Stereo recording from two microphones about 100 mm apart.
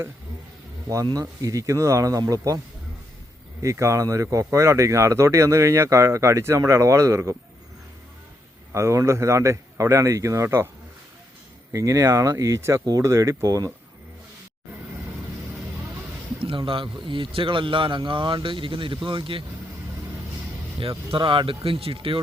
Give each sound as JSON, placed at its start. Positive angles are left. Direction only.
{"t": 1.2, "sound": "speech", "side_deg": -35}
{"t": 3.6, "sound": "speech", "side_deg": -30}
{"t": 8.7, "sound": "speech", "side_deg": -30}
{"t": 11.7, "sound": "speech", "side_deg": -35}
{"t": 16.4, "sound": "a man's voice", "side_deg": -60}
{"t": 21.1, "sound": "a man's voice", "side_deg": -55}